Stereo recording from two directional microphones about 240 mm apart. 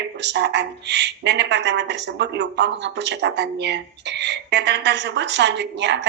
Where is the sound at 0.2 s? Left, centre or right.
Right.